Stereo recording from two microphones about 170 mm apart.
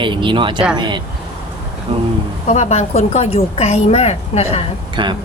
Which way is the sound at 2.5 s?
40° left (ahead or behind).